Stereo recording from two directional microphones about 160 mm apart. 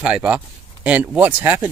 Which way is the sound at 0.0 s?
5° right (ahead or behind).